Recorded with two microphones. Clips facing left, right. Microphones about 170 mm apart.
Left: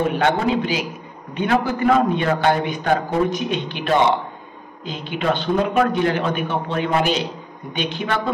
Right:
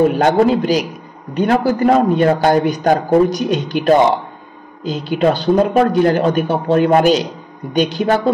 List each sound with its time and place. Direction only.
0.1 s a man's voice: 40° right (ahead or behind)